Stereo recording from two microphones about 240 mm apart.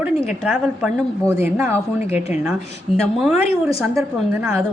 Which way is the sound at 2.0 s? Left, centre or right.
Left.